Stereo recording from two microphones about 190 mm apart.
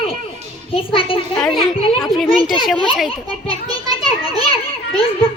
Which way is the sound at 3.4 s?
30° left (ahead or behind).